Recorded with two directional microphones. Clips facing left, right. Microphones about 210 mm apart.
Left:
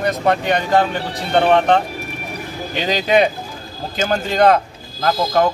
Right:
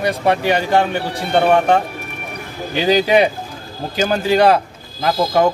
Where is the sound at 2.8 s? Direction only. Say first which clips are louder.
Right 2 dB; 10° right (ahead or behind).